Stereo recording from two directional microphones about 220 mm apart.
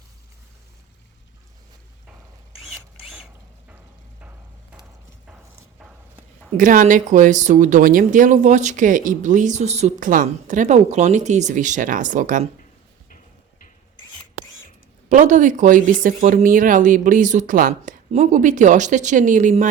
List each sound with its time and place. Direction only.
2.7 s a sound: centre (ahead or behind)
5.8 s clip-clop: 5° right (ahead or behind)
6.6 s speech: 35° right (ahead or behind)
15.1 s speech: 35° right (ahead or behind)